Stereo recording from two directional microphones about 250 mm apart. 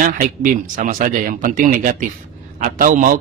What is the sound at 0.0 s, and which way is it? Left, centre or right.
Speech, right.